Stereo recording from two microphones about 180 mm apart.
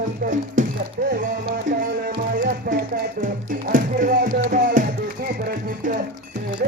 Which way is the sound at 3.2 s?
50° right (ahead or behind).